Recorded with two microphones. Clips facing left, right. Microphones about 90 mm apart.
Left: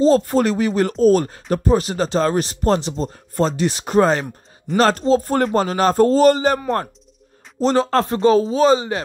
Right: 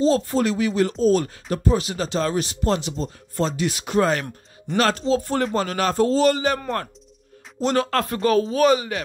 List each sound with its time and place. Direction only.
0.2 s speech: 50° left (ahead or behind); by 4.3 s 30° left (ahead or behind)
4.9 s speech: 45° left (ahead or behind)
7.6 s speech: 30° left (ahead or behind)